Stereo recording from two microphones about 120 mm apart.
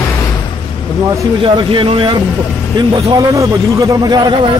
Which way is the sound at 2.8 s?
35° right (ahead or behind).